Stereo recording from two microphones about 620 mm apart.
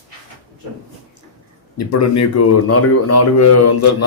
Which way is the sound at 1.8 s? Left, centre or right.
Left.